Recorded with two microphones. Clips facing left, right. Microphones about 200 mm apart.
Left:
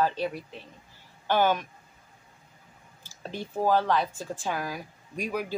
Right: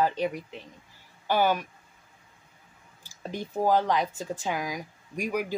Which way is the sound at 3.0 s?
15° right (ahead or behind).